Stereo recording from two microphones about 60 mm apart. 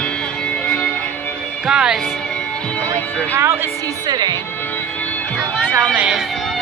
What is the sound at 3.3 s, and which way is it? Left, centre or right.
Speech, right.